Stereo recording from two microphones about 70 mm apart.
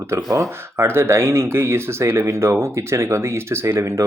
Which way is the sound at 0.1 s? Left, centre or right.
Right.